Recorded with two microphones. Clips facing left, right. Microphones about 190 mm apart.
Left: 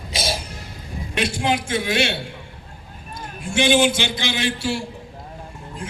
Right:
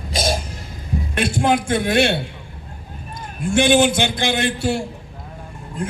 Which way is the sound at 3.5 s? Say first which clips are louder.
Right 3 dB; 55° right (ahead or behind).